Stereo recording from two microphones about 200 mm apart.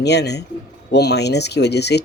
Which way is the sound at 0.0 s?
55° left (ahead or behind).